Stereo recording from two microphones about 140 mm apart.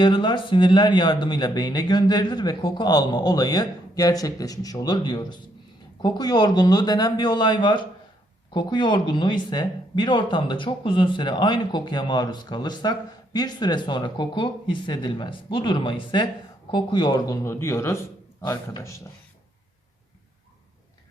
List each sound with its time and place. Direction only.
0.0 s speech: 35° left (ahead or behind)